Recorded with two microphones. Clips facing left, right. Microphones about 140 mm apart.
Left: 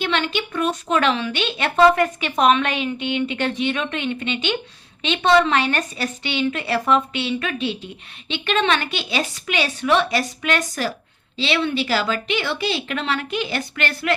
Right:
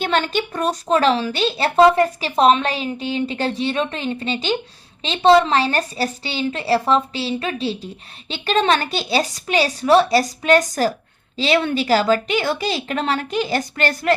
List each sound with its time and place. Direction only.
0.0 s speech: 40° right (ahead or behind)